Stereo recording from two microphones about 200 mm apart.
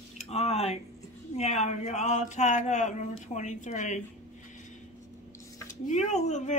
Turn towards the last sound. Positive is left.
turn(degrees=35)  # may be behind; listen again after turning